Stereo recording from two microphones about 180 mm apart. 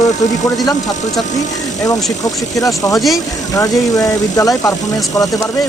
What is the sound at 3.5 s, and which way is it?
Speech, 20° left (ahead or behind).